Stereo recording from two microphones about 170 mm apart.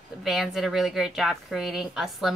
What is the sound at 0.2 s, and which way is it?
A woman's voice, centre (ahead or behind).